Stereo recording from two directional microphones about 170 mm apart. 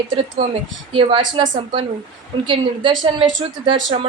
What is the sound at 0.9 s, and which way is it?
A woman's voice, 30° right (ahead or behind).